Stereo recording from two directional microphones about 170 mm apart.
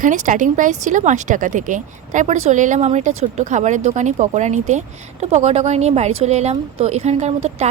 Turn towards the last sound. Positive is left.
turn(degrees=-40)  # may be behind; listen again after turning